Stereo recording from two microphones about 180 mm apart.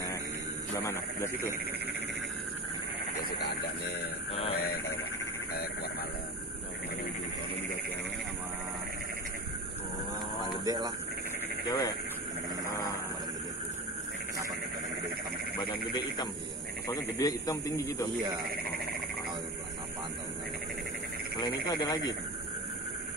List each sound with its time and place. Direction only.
0.7 s a man's voice: 15° left (ahead or behind)
4.3 s speech: 30° left (ahead or behind)
5.5 s speech: 60° left (ahead or behind)
10.6 s speech: 20° right (ahead or behind)
11.6 s speech: 15° left (ahead or behind)
12.6 s a sound: 20° left (ahead or behind)
16.8 s a man's voice: 20° left (ahead or behind)
21.4 s a man's voice: 25° left (ahead or behind)